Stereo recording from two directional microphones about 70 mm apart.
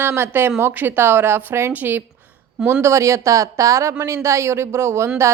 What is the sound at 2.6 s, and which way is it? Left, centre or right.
A woman's voice, right.